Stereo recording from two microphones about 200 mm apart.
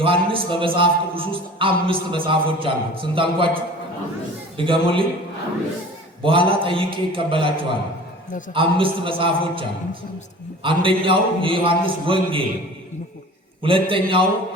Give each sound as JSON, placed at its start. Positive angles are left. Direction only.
{"t": 0.0, "sound": "a man's voice", "side_deg": -25}
{"t": 6.2, "sound": "a man's voice", "side_deg": -25}
{"t": 13.6, "sound": "a man's voice", "side_deg": -25}